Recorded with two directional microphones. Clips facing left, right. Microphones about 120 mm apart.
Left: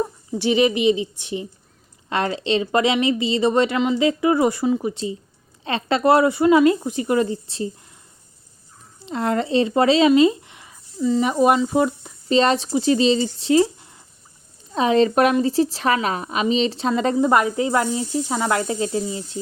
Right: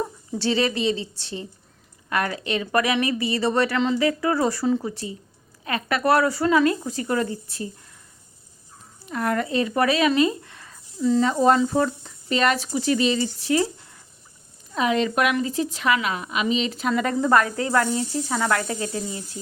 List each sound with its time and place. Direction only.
0.0 s a woman's voice: 15° left (ahead or behind)
9.0 s a woman's voice: 25° left (ahead or behind)
10.1 s a sound: 20° left (ahead or behind)
11.2 s speech: 15° left (ahead or behind)
12.4 s a woman's voice: 25° left (ahead or behind)
14.7 s a woman's voice: 30° left (ahead or behind)